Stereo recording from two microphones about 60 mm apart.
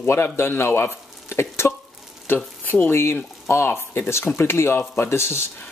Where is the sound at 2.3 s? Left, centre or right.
Left.